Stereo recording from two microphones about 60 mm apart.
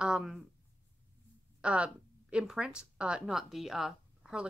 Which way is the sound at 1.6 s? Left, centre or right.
Centre.